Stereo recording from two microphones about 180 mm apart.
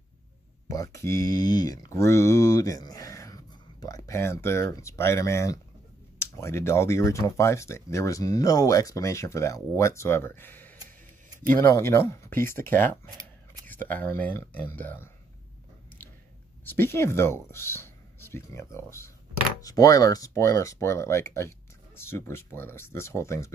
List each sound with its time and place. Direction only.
0.7 s speech: 15° left (ahead or behind)
16.6 s speech: 10° left (ahead or behind)